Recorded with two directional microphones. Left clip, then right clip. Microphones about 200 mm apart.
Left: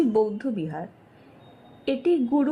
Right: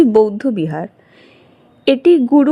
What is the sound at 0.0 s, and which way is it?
A woman's voice, 40° right (ahead or behind).